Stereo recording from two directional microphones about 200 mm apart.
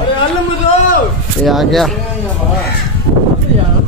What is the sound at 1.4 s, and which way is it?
Speech, centre (ahead or behind).